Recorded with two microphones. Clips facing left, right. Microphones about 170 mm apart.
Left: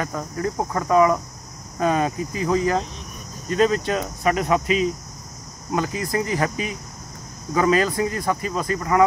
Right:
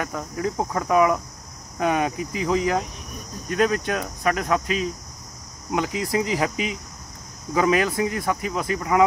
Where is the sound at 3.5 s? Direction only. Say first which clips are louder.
Left 2 dB; 5° right (ahead or behind).